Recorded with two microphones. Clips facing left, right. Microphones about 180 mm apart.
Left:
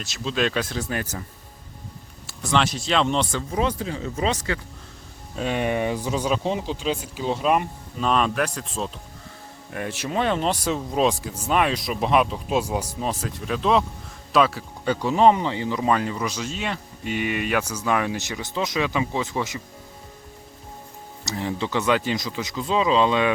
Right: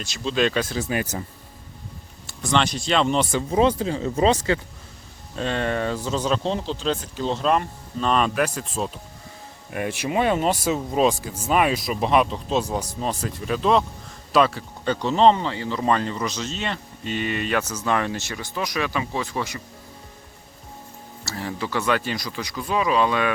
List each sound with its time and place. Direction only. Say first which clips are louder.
0.0 s speech: right 2 dB; centre (ahead or behind); by 1.2 s 15° right (ahead or behind)
2.2 s speech: even; 5° left (ahead or behind)
3.5 s speech: right 7 dB; 30° right (ahead or behind)
5.4 s speech: left 1 dB; 10° left (ahead or behind)
9.7 s speech: right 2 dB; 10° right (ahead or behind); by 15.8 s 15° left (ahead or behind)
15.8 s speech: right 1 dB; 5° left (ahead or behind)
21.2 s speech: left 2 dB; 20° left (ahead or behind)